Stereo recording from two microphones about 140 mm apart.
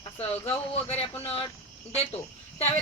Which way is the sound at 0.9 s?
45° left (ahead or behind).